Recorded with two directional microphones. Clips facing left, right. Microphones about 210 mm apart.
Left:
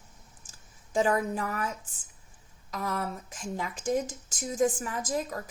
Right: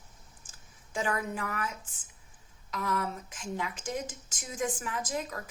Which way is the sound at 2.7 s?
40° left (ahead or behind).